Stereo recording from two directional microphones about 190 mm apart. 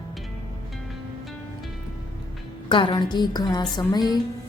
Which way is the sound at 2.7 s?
25° left (ahead or behind).